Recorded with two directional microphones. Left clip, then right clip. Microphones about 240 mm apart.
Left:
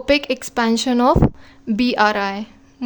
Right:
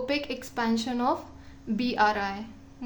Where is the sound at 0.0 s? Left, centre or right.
Left.